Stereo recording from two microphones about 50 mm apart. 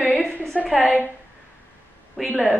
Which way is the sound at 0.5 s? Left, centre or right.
Centre.